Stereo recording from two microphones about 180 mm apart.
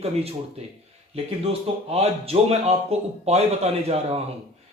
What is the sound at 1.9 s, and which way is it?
Speech, 35° right (ahead or behind).